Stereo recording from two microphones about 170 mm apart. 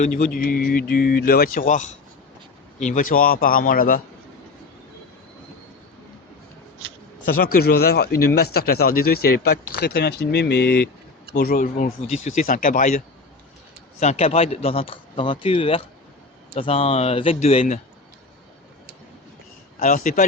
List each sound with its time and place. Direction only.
0.0 s speech: 55° left (ahead or behind)
7.3 s speech: 60° left (ahead or behind); by 10.8 s 80° left
11.3 s speech: 65° left (ahead or behind)
12.2 s speech: 40° left (ahead or behind)
12.5 s speech: 55° left (ahead or behind)
14.0 s speech: 40° left (ahead or behind)
19.8 s speech: 50° left (ahead or behind)